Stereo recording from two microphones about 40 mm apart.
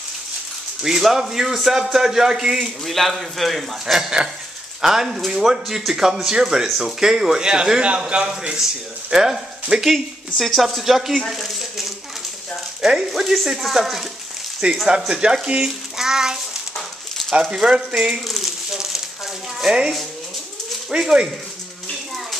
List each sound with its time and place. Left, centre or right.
0.8 s a man's voice: centre
2.8 s a man's voice: centre; by 8.3 s right
9.1 s a man's voice: centre
10.4 s speech: centre
14.6 s speech: right
15.0 s a man's voice: centre
18.3 s a sound: centre
19.6 s speech: centre
20.9 s speech: right